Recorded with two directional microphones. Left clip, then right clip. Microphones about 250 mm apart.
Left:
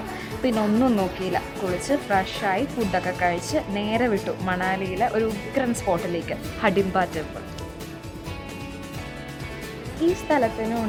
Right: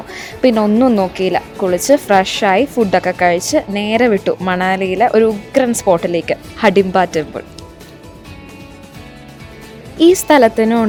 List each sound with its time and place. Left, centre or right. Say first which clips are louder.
0.4 s a woman's voice: right 11 dB; right
10.2 s a woman's voice: right 12 dB; right